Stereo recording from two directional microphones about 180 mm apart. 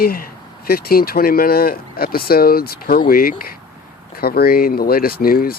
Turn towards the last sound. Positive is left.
turn(degrees=55)  # may be behind; listen again after turning